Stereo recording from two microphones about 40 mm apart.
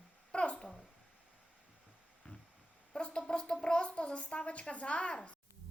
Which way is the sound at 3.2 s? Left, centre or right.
Left.